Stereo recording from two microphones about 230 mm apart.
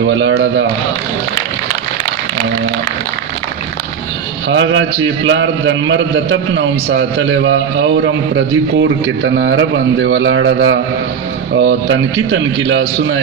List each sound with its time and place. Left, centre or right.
0.0 s a man's voice: right
4.4 s a man's voice: right